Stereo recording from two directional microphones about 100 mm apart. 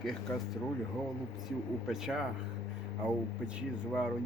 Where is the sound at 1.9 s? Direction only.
5° right (ahead or behind).